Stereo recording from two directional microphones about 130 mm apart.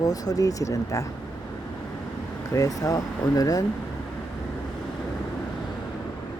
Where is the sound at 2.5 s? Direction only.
25° left (ahead or behind).